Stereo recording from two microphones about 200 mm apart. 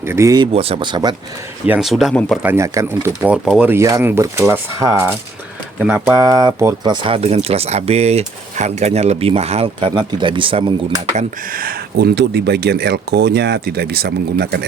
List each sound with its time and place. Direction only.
0.0 s speech: 15° right (ahead or behind)
0.5 s speech: 30° right (ahead or behind)
1.6 s speech: 5° right (ahead or behind)
2.4 s speech: 10° right (ahead or behind)
11.2 s speech: 45° right (ahead or behind)